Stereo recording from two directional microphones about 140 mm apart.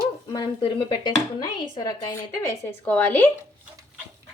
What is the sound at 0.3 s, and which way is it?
Dishes, 35° left (ahead or behind).